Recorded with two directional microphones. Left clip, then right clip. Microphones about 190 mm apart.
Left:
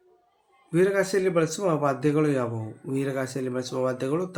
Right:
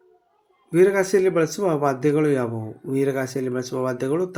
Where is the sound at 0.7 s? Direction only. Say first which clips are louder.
Right 5 dB; 15° right (ahead or behind).